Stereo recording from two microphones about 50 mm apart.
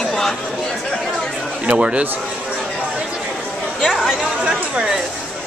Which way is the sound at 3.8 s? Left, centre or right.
Centre.